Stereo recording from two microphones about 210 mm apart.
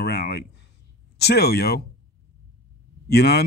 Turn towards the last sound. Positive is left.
turn(degrees=50)  # may be behind; listen again after turning